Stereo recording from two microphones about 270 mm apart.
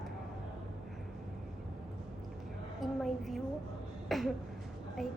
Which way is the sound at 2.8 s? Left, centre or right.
Centre.